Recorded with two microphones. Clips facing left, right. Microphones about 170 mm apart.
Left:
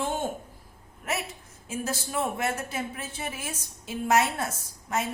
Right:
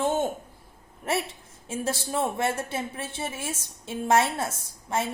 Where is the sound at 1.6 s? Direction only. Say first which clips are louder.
Right 2 dB; 30° right (ahead or behind).